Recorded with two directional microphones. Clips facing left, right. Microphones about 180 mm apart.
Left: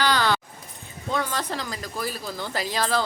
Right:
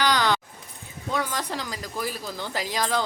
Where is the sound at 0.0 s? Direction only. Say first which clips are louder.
Even; 15° right (ahead or behind).